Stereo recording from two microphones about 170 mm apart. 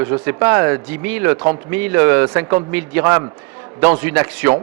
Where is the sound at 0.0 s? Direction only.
15° right (ahead or behind).